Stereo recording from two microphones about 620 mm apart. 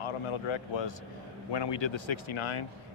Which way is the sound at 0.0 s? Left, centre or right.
Left.